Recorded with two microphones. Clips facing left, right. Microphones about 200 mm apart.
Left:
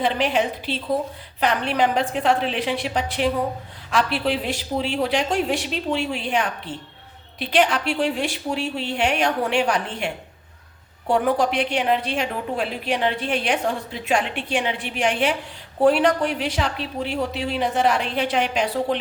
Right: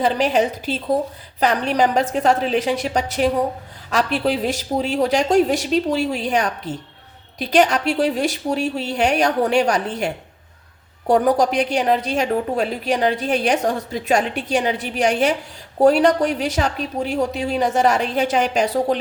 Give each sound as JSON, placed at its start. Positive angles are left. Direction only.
{"t": 0.0, "sound": "a woman's voice", "side_deg": -40}